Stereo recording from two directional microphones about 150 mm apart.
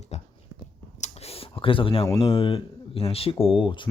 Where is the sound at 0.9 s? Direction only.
45° left (ahead or behind).